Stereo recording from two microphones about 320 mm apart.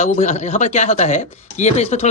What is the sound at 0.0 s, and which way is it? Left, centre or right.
Speech, left.